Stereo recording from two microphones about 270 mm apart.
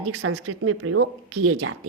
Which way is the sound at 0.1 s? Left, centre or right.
Right.